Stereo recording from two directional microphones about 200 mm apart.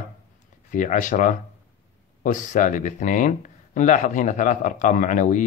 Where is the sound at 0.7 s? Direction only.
40° left (ahead or behind).